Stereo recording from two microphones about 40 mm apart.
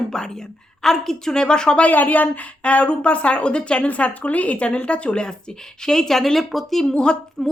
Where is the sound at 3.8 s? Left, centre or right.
Left.